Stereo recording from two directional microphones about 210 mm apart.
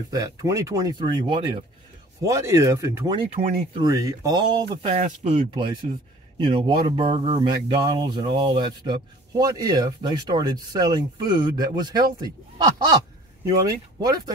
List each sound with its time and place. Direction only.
0.1 s speech: 15° right (ahead or behind)
3.2 s speech: 30° right (ahead or behind)
3.7 s speech: 15° right (ahead or behind)
4.8 s speech: 30° right (ahead or behind)